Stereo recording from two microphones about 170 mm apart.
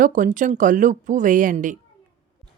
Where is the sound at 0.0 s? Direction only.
50° right (ahead or behind).